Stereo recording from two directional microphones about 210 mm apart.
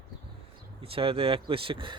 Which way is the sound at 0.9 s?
25° right (ahead or behind).